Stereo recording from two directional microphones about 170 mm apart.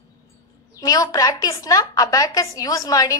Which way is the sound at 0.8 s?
20° left (ahead or behind).